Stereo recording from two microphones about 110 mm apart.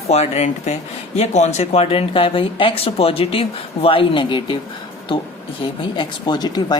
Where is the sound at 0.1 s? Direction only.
85° left; by 4.5 s 50° left (ahead or behind).